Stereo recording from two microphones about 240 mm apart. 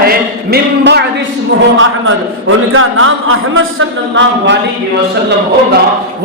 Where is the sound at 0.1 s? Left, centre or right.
Right.